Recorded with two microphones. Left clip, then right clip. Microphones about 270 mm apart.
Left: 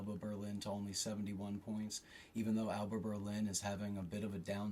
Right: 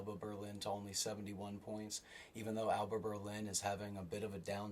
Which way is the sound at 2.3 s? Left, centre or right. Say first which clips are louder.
Right 3 dB; right.